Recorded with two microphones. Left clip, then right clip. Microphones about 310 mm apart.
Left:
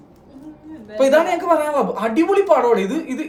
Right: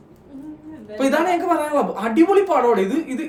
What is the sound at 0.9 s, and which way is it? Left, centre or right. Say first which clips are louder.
Speech: left 4 dB; centre.